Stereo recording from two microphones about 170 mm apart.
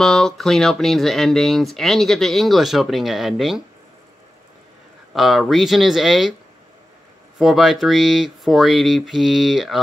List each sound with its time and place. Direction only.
0.0 s speech: 5° left (ahead or behind)
5.1 s speech: centre (ahead or behind)
7.3 s speech: centre (ahead or behind)